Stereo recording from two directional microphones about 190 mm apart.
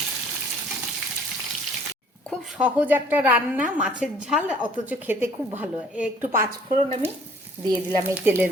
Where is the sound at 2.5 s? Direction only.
10° right (ahead or behind).